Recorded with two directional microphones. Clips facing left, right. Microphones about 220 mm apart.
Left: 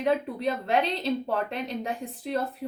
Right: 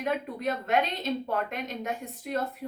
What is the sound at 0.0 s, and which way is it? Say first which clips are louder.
A woman's voice: left 4 dB; 30° left (ahead or behind).